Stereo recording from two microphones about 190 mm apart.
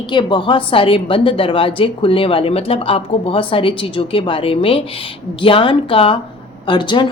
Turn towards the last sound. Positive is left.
turn(degrees=25)  # may be behind; listen again after turning